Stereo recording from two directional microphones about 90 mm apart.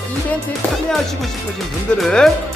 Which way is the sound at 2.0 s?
5° left (ahead or behind).